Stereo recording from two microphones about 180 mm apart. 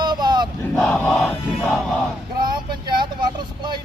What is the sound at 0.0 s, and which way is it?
Battle cry, 25° right (ahead or behind).